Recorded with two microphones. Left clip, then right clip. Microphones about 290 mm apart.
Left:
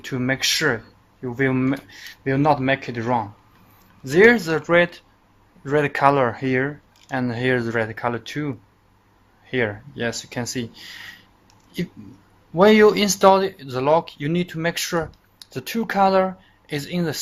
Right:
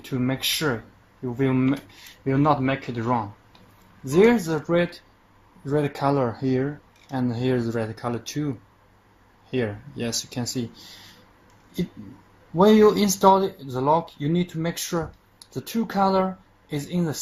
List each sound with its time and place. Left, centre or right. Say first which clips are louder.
0.1 s speech: left 4 dB; left
9.5 s speech: left 4 dB; left
10.3 s speech: left 2 dB; left
12.5 s speech: left 3 dB; left